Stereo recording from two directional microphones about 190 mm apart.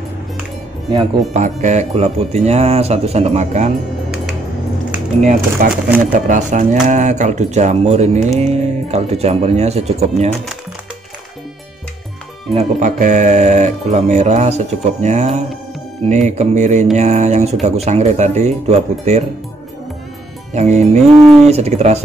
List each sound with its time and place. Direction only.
1.3 s speech: 40° right (ahead or behind)
5.2 s speech: 45° right (ahead or behind)
12.5 s speech: 40° right (ahead or behind)
20.5 s speech: 35° right (ahead or behind)